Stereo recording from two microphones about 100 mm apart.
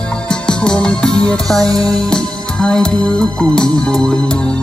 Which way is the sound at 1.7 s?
40° right (ahead or behind).